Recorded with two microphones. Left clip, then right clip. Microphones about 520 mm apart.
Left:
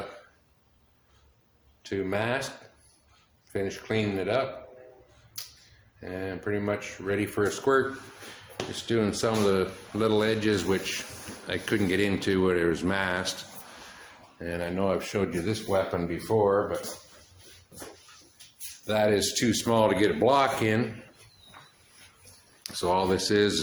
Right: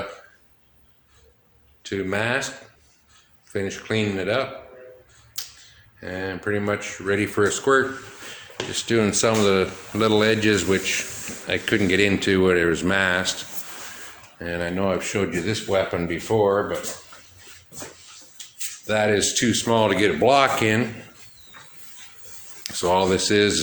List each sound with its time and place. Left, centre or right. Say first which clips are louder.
1.8 s speech: right 5 dB; left
3.5 s speech: right 4 dB; left
5.4 s a sound: right 7 dB; left
6.0 s speech: right 6 dB; left
14.3 s speech: right 5 dB; left
18.9 s speech: right 4 dB; left
22.6 s speech: right 6 dB; left